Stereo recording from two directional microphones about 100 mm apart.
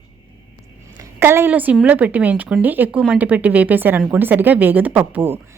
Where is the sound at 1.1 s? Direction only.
25° right (ahead or behind).